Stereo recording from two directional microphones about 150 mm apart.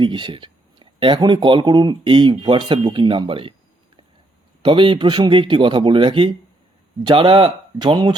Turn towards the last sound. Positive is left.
turn(degrees=-35)  # may be behind; listen again after turning